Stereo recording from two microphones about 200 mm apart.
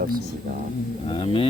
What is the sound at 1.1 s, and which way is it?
Speech, 25° left (ahead or behind).